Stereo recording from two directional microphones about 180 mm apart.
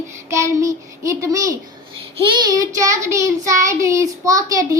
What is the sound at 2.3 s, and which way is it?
A child's voice, 20° right (ahead or behind).